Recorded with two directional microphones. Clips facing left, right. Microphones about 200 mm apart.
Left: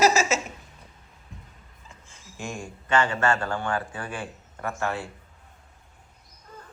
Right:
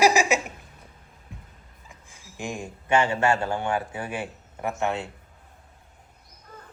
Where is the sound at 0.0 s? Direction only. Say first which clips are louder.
Right 1 dB; 15° right (ahead or behind).